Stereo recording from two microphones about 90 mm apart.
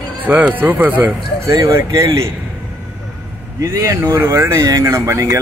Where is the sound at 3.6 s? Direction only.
35° right (ahead or behind).